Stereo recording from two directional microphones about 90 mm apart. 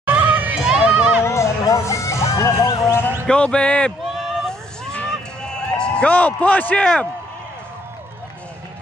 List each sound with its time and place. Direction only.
0.0 s children playing: 20° right (ahead or behind)
0.6 s run: 10° right (ahead or behind)
1.2 s a sound: 30° left (ahead or behind)
3.3 s speech: 10° left (ahead or behind)
4.1 s a sound: centre (ahead or behind)
4.9 s run: 10° left (ahead or behind)